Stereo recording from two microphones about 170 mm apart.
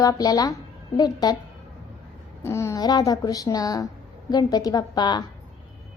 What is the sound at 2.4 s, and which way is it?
A woman's voice, 15° left (ahead or behind).